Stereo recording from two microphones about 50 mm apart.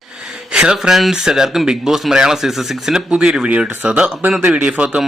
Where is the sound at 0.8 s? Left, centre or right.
Centre.